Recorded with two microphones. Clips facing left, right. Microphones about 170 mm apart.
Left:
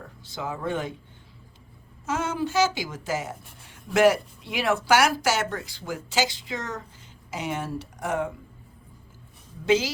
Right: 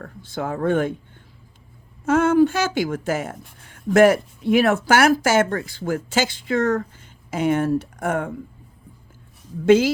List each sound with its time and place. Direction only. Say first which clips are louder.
0.0 s a woman's voice: right 6 dB; 50° right (ahead or behind)
2.0 s a woman's voice: right 12 dB; 55° right (ahead or behind)
9.6 s a woman's voice: right 8 dB; 50° right (ahead or behind)